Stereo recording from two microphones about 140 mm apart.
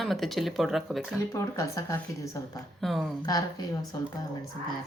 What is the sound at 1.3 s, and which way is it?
Speech, 20° left (ahead or behind).